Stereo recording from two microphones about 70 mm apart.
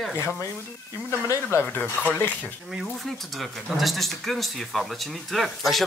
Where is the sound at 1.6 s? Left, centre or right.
Left.